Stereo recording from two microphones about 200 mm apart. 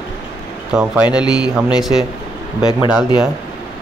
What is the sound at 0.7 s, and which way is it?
Speech, 5° right (ahead or behind).